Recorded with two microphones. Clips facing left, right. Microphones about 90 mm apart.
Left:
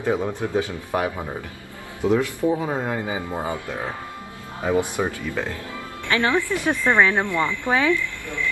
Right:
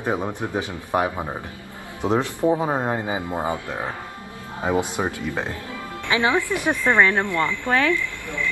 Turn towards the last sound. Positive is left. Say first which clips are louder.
# even
turn(degrees=10)  # may be behind; listen again after turning